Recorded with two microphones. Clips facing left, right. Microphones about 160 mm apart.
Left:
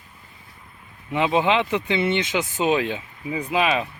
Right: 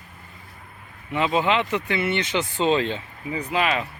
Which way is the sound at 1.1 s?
20° left (ahead or behind).